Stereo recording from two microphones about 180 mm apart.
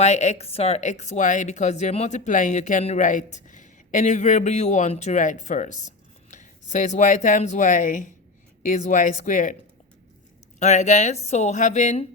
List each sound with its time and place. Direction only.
0.0 s speech: 40° left (ahead or behind)
10.6 s speech: 40° left (ahead or behind)